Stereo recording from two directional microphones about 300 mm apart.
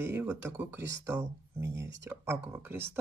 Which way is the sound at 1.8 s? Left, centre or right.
Right.